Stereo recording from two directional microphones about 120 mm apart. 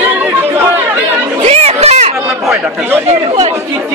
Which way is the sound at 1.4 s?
60° right (ahead or behind).